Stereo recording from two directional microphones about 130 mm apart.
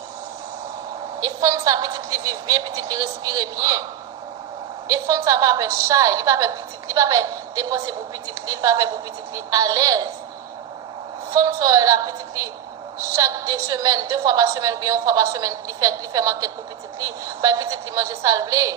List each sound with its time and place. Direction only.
1.2 s a woman's voice: 25° right (ahead or behind)
4.9 s a woman's voice: 25° right (ahead or behind)
11.3 s a woman's voice: 25° right (ahead or behind)